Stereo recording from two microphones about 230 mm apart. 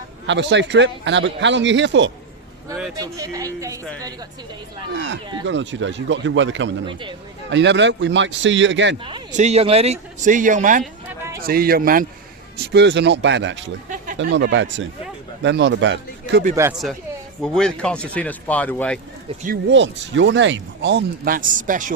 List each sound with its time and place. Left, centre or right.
0.3 s speech: right
2.9 s speech: centre
5.4 s speech: right
9.0 s a man's voice: right
17.4 s speech: centre
19.7 s speech: right